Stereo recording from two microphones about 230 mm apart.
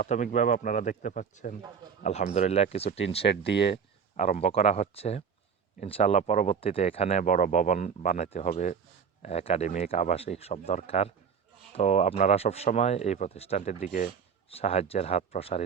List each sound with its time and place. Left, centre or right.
0.0 s speech: left
3.2 s speech: left
4.2 s speech: left